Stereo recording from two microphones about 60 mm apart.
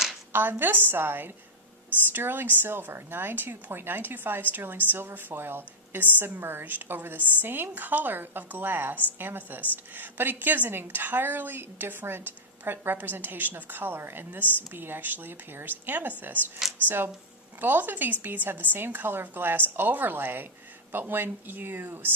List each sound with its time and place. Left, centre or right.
0.3 s a woman's voice: right
16.6 s speech: centre
17.6 s a woman's voice: right